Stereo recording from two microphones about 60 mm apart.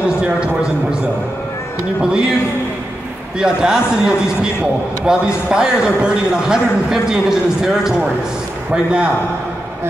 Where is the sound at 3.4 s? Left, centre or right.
Centre.